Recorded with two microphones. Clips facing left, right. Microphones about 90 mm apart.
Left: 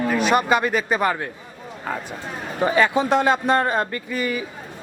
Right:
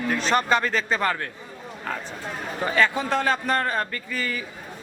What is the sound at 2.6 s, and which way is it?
A man's voice, 15° left (ahead or behind).